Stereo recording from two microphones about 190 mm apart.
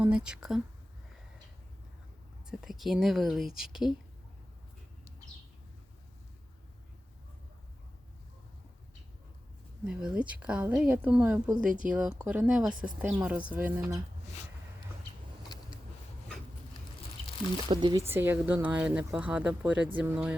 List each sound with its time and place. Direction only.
0.0 s speech: 5° right (ahead or behind)
2.5 s a woman's voice: centre (ahead or behind)
9.8 s a woman's voice: 5° right (ahead or behind)
17.7 s speech: 25° right (ahead or behind)
18.1 s speech: 10° right (ahead or behind)